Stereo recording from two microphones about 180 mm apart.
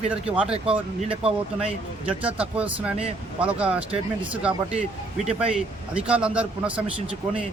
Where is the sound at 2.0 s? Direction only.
5° right (ahead or behind).